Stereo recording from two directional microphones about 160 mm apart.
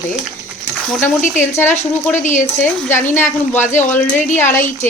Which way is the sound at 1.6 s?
45° left (ahead or behind).